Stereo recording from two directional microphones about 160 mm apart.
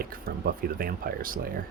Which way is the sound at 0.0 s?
65° right (ahead or behind).